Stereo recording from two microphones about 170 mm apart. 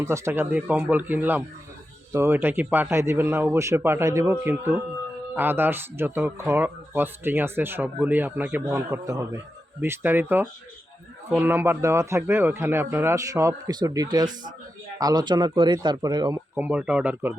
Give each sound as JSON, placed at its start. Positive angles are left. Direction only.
{"t": 0.0, "sound": "speech", "side_deg": -15}
{"t": 16.6, "sound": "speech", "side_deg": -10}